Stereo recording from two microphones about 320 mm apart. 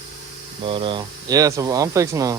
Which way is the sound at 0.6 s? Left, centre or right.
Centre.